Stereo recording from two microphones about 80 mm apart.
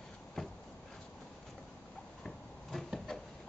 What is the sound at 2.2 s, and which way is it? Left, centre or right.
Cupboard open or close, centre.